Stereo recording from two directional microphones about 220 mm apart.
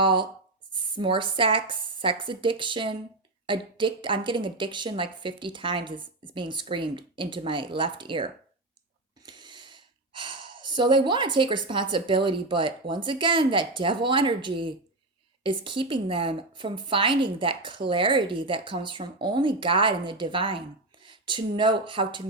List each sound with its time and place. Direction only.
0.0 s a woman's voice: 20° right (ahead or behind)